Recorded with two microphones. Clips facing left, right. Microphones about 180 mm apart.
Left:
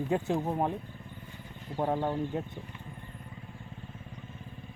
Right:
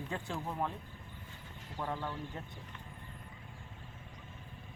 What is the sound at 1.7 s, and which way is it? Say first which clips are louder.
Speech: left 9 dB; 45° left (ahead or behind).